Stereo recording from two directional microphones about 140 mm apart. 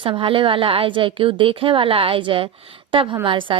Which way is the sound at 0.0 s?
40° right (ahead or behind).